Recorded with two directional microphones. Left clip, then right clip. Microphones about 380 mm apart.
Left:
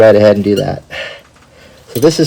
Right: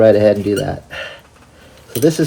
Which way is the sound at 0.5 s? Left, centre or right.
Left.